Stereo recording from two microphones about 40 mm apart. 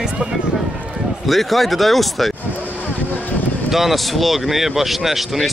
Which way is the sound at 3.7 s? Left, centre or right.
Centre.